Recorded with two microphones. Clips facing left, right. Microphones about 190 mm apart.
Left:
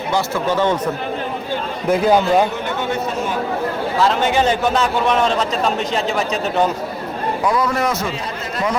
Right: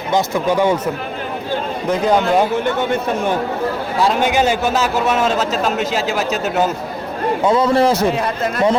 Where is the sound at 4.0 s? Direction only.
10° right (ahead or behind).